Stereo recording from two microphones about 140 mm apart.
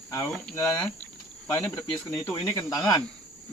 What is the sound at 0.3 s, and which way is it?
Speech, 5° left (ahead or behind).